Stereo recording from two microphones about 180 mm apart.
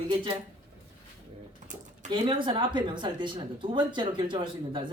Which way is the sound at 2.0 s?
25° right (ahead or behind).